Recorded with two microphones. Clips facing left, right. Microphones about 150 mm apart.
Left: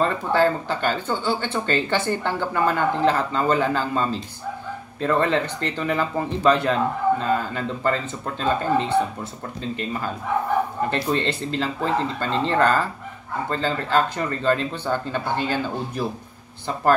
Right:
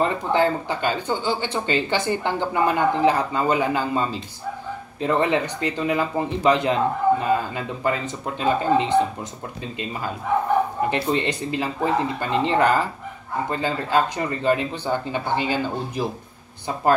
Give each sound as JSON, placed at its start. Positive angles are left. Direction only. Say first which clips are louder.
{"t": 0.0, "sound": "speech", "louder": "even", "side_deg": -15}
{"t": 10.9, "sound": "speech", "louder": "right 1 dB", "side_deg": -15}